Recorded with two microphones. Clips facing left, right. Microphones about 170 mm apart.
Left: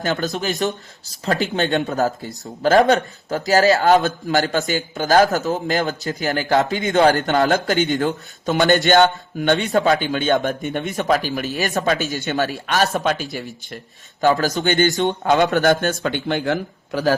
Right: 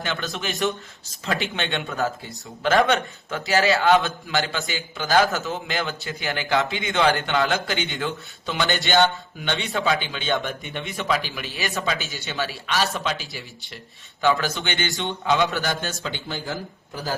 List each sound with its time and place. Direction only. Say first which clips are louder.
0.0 s a man's voice: left 7 dB; 40° left (ahead or behind); by 17.2 s 75° left (ahead or behind)